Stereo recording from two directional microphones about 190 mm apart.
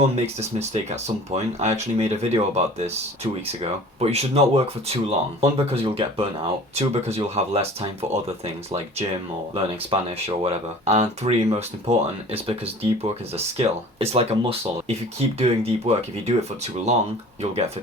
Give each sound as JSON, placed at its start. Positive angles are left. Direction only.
{"t": 0.3, "sound": "speech", "side_deg": -35}